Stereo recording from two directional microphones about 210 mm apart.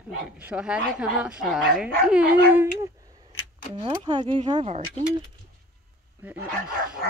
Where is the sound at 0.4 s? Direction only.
5° right (ahead or behind); by 5.0 s 30° right (ahead or behind).